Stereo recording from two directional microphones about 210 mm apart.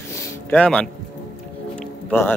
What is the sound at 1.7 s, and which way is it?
Music, 5° left (ahead or behind).